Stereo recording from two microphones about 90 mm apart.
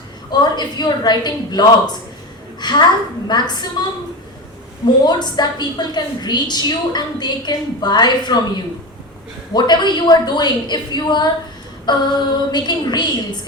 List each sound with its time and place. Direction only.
0.3 s a woman's voice: 55° left (ahead or behind)
5.0 s a woman's voice: 55° left (ahead or behind)
9.5 s a woman's voice: 55° left (ahead or behind)